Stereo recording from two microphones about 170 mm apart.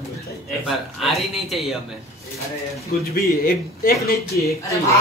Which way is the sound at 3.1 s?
60° left (ahead or behind).